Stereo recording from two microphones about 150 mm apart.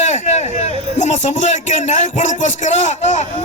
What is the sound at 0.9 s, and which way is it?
Speech, 50° left (ahead or behind).